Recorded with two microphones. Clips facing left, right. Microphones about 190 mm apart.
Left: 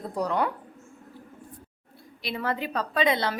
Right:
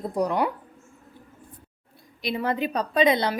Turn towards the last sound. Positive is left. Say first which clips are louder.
# right 4 dB
turn(degrees=-20)  # may be behind; listen again after turning